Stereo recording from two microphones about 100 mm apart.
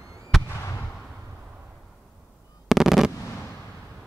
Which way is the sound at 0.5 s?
25° left (ahead or behind).